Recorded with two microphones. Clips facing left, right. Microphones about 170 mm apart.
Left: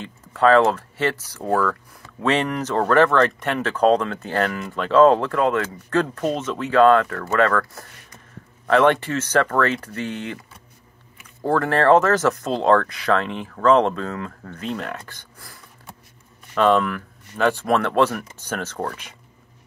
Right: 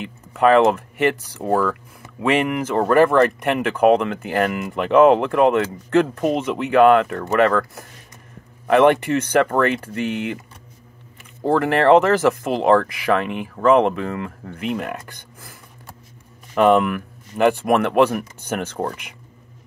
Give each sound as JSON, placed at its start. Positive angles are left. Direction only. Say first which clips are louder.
{"t": 0.0, "sound": "speech", "louder": "right 1 dB", "side_deg": -15}
{"t": 11.4, "sound": "speech", "louder": "right 2 dB", "side_deg": -20}
{"t": 16.5, "sound": "speech", "louder": "right 3 dB", "side_deg": -15}